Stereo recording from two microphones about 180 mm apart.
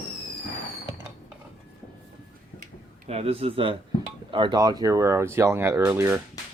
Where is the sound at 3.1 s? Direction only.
35° right (ahead or behind).